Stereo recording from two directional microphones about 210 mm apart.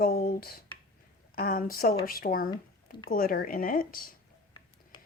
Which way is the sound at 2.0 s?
45° left (ahead or behind).